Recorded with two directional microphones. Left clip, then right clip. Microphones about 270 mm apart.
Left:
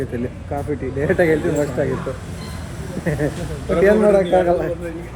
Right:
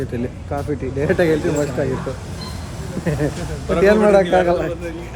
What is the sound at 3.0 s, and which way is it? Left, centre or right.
A man's voice, centre.